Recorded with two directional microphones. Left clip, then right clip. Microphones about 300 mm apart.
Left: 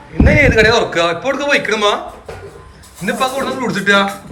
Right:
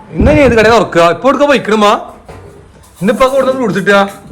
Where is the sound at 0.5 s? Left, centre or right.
Right.